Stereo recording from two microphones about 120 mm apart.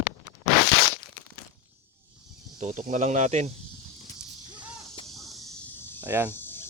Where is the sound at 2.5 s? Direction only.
75° right (ahead or behind).